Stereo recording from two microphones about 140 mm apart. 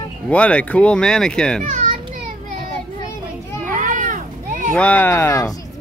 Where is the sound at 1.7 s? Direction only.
65° right (ahead or behind).